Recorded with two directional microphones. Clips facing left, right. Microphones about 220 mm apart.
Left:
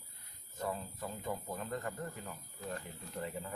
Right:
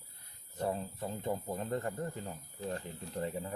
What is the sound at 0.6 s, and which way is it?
Speech, 30° right (ahead or behind).